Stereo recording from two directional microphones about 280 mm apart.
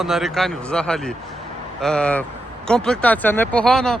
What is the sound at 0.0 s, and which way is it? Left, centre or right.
Speech, centre.